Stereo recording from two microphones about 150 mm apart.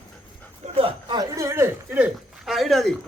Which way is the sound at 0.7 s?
35° right (ahead or behind).